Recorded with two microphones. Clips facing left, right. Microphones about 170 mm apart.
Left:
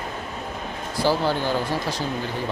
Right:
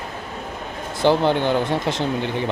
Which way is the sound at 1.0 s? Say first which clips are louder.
Right 5 dB; 20° right (ahead or behind).